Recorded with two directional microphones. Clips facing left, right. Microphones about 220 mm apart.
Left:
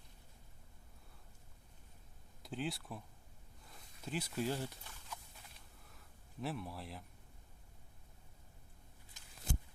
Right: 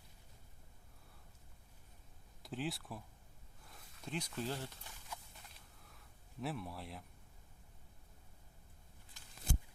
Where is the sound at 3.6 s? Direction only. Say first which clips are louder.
Left 1 dB; centre (ahead or behind).